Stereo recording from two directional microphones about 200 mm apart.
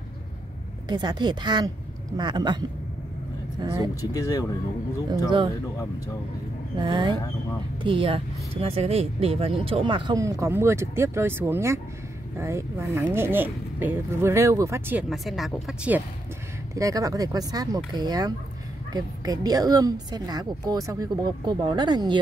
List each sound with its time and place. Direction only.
0.8 s speech: 20° right (ahead or behind)
3.6 s speech: 20° right (ahead or behind)
4.1 s speech: 15° left (ahead or behind)
6.8 s speech: 25° right (ahead or behind); by 16.0 s 5° right (ahead or behind)
16.7 s speech: 15° right (ahead or behind)